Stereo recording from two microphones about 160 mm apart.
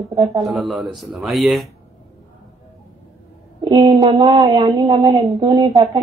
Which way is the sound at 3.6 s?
25° right (ahead or behind).